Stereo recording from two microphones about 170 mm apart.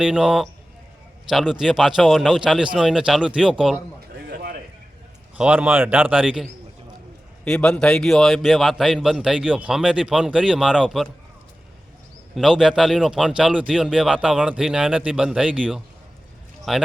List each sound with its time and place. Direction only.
0.0 s a man's voice: 5° right (ahead or behind)
4.3 s a sound: 65° right (ahead or behind)
5.4 s a man's voice: 10° right (ahead or behind)
7.4 s a man's voice: 5° left (ahead or behind)
12.3 s a man's voice: 5° right (ahead or behind)